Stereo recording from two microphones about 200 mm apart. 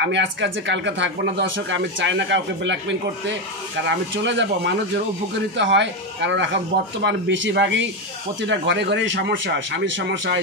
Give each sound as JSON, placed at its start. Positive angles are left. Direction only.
{"t": 0.0, "sound": "speech", "side_deg": -65}